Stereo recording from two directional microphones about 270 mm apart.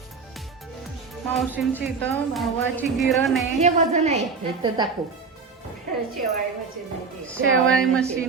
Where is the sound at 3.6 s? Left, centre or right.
Right.